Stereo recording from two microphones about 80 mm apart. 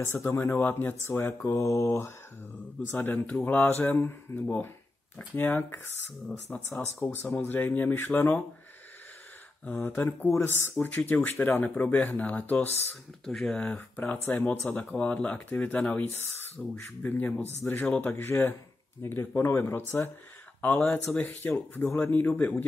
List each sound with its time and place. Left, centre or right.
0.0 s speech: left
6.5 s speech: centre
9.7 s speech: left
10.9 s speech: left
13.2 s speech: centre
14.1 s speech: left
16.1 s speech: left
18.1 s speech: left